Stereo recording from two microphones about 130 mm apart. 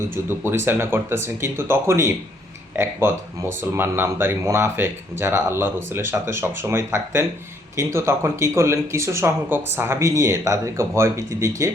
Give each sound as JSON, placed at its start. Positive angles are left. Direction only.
{"t": 0.1, "sound": "speech", "side_deg": -15}